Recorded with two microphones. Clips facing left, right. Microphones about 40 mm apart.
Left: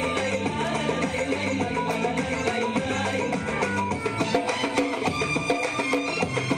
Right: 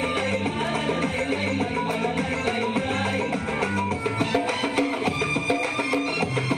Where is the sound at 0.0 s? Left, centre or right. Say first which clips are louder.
Right 1 dB; right.